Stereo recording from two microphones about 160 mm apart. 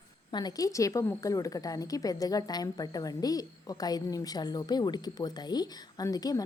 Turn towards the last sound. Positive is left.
turn(degrees=25)  # may be behind; listen again after turning